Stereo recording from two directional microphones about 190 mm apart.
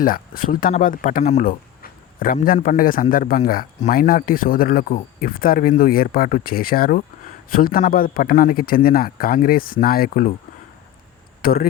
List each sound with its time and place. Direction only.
0.0 s speech: 50° left (ahead or behind)
11.4 s speech: 50° left (ahead or behind)